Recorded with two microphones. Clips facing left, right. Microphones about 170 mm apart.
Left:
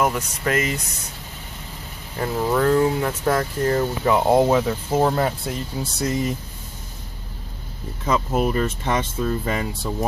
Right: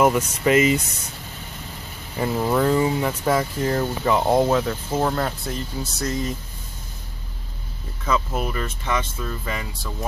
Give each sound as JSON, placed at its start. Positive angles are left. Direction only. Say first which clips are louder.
{"t": 0.0, "sound": "speech", "louder": "right 4 dB", "side_deg": -10}
{"t": 2.1, "sound": "speech", "louder": "even", "side_deg": -5}
{"t": 8.0, "sound": "speech", "louder": "left 1 dB", "side_deg": 30}
{"t": 8.4, "sound": "speech", "louder": "left 6 dB", "side_deg": 40}